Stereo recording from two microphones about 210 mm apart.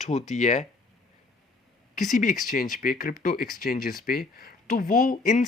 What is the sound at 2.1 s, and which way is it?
Speech, 40° left (ahead or behind).